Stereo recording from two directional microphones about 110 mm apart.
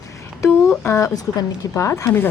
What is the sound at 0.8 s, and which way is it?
A woman's voice, 25° left (ahead or behind).